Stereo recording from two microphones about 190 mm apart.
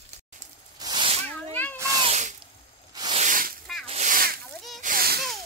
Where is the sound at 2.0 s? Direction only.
35° right (ahead or behind).